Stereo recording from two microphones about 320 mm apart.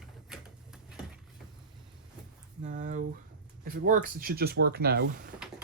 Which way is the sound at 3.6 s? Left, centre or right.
Right.